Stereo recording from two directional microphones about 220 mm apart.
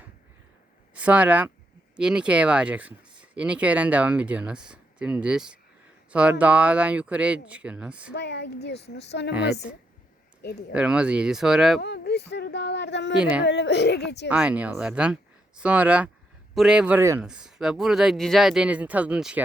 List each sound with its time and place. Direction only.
0.9 s speech: 5° right (ahead or behind)
8.1 s a woman's voice: 50° left (ahead or behind)
10.7 s speech: 5° right (ahead or behind)
11.8 s a woman's voice: 50° left (ahead or behind)
14.3 s speech: 5° right (ahead or behind)